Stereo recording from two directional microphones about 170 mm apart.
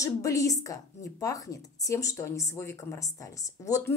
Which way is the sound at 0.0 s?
20° left (ahead or behind).